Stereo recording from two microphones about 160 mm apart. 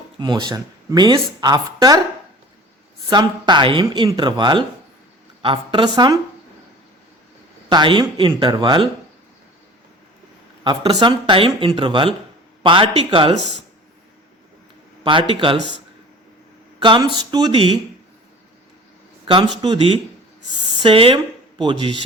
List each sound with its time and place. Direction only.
0.2 s speech: 25° right (ahead or behind)
3.1 s speech: 25° right (ahead or behind)
7.7 s speech: 30° right (ahead or behind)
10.6 s speech: 30° right (ahead or behind)
15.0 s speech: 30° right (ahead or behind)
16.8 s speech: 30° right (ahead or behind)
19.2 s speech: 30° right (ahead or behind)